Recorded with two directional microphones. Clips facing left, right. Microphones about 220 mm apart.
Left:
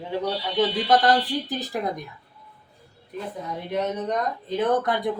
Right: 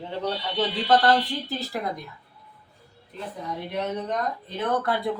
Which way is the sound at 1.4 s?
15° left (ahead or behind).